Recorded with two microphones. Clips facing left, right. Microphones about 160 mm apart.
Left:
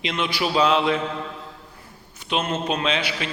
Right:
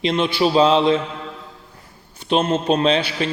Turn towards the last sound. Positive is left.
turn(degrees=-35)  # may be behind; listen again after turning